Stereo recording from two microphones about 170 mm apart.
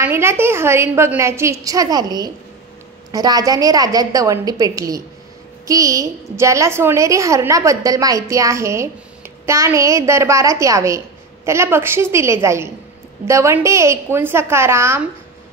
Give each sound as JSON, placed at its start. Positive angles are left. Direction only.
{"t": 0.0, "sound": "a woman's voice", "side_deg": -15}